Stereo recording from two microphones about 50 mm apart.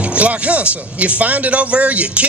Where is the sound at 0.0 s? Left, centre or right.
Right.